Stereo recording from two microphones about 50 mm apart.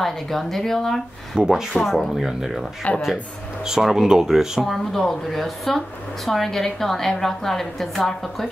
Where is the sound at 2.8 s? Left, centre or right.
Left.